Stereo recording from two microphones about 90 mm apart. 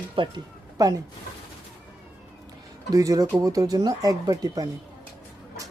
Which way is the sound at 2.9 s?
40° right (ahead or behind).